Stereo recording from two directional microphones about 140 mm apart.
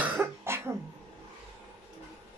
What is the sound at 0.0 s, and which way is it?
Cough, 15° right (ahead or behind).